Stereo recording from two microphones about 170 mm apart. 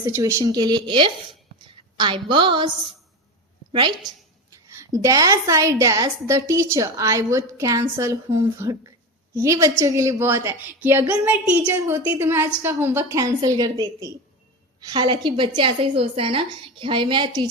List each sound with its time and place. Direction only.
0.0 s a woman's voice: 15° right (ahead or behind)
3.7 s a woman's voice: 30° right (ahead or behind)